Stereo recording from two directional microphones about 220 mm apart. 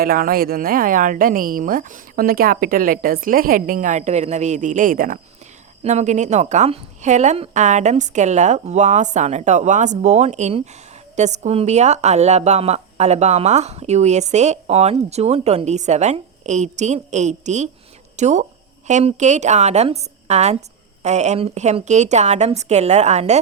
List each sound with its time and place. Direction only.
0.0 s speech: 40° right (ahead or behind)